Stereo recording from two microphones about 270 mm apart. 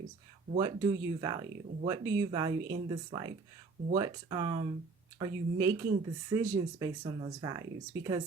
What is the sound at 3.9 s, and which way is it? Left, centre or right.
Speech, centre.